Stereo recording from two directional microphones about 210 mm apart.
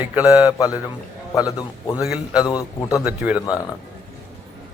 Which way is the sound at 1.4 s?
15° left (ahead or behind).